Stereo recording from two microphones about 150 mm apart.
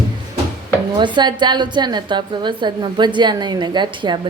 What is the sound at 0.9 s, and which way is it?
A woman's voice, 30° right (ahead or behind).